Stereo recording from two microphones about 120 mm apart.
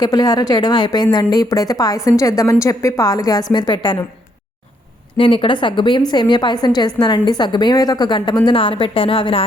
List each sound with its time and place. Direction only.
0.0 s a woman's voice: 35° left (ahead or behind)
5.1 s a woman's voice: 45° left (ahead or behind)